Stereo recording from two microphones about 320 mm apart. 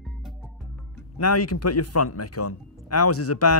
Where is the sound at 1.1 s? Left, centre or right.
Left.